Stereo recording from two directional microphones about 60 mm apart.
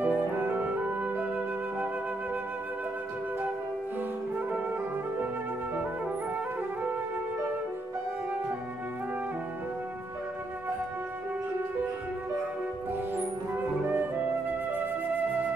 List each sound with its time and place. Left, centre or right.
0.0 s flute: right
13.8 s flute: right